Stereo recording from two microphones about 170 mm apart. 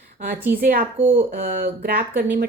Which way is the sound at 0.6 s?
55° right (ahead or behind).